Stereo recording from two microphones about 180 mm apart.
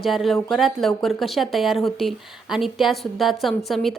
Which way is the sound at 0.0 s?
Centre (ahead or behind).